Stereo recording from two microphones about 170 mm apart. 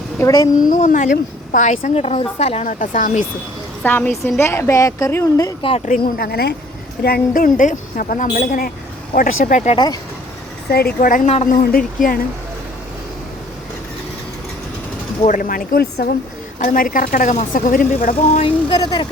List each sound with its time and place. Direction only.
0.2 s speech: 20° left (ahead or behind)
0.6 s a woman's voice: 50° left (ahead or behind)
2.0 s a woman's voice: 35° left (ahead or behind)
3.8 s a woman's voice: 10° left (ahead or behind)
5.8 s a woman's voice: 55° left (ahead or behind)
9.7 s speech: 25° left (ahead or behind)
10.7 s a woman's voice: 65° left (ahead or behind); by 11.5 s 45° left (ahead or behind)
11.5 s speech: 60° left (ahead or behind)
15.3 s speech: 55° left (ahead or behind)
16.6 s a woman's voice: 55° left (ahead or behind)
18.1 s a sound: 35° left (ahead or behind)